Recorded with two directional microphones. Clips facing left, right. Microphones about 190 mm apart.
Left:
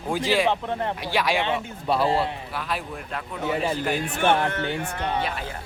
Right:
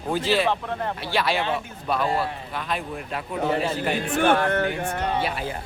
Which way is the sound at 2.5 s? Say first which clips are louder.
Right 1 dB; 5° left (ahead or behind).